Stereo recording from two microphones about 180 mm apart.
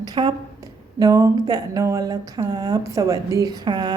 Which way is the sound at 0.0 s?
25° right (ahead or behind).